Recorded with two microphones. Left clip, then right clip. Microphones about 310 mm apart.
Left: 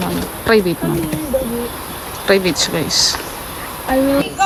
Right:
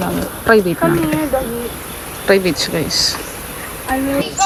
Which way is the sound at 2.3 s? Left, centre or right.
Centre.